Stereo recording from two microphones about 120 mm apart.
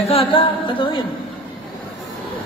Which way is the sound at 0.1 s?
50° left (ahead or behind).